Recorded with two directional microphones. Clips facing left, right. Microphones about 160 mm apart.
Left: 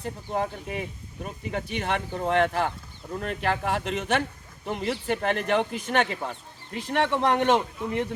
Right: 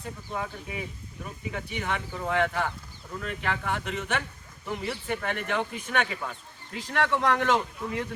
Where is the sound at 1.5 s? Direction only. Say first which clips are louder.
Left 4 dB; 35° left (ahead or behind).